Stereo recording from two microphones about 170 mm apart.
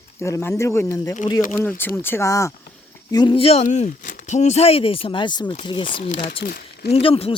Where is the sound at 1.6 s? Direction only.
10° left (ahead or behind); by 3.6 s 35° left (ahead or behind).